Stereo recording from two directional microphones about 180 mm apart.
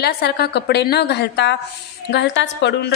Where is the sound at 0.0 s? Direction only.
60° left (ahead or behind).